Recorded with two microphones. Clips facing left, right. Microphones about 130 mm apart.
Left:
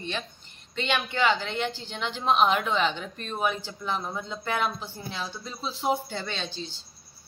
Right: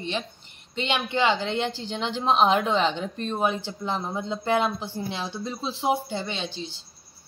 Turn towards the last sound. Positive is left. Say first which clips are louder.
# right 2 dB
turn(degrees=-15)  # may be behind; listen again after turning